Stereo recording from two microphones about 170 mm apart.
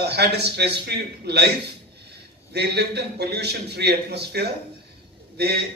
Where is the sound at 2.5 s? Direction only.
70° right (ahead or behind).